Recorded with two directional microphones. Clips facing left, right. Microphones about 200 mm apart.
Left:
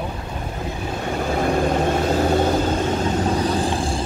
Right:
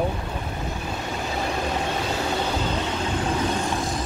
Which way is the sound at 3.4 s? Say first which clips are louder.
Left 4 dB; 35° left (ahead or behind).